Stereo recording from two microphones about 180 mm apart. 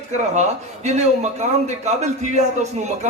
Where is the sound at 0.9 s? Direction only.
40° right (ahead or behind).